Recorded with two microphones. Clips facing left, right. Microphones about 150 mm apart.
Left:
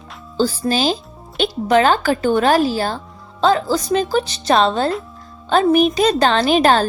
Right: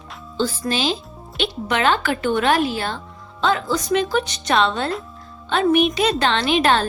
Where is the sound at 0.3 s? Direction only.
35° left (ahead or behind).